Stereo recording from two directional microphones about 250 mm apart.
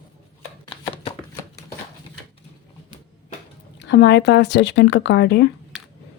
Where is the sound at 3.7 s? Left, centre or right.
Left.